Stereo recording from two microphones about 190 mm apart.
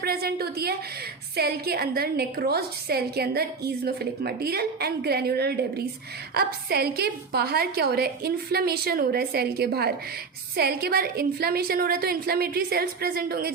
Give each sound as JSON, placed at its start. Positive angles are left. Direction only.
{"t": 0.0, "sound": "a woman's voice", "side_deg": -55}